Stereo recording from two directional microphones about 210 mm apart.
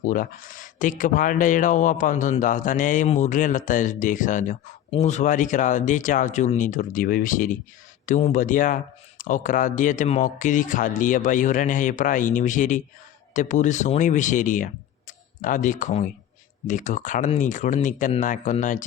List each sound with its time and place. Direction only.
0.1 s speech: 40° left (ahead or behind)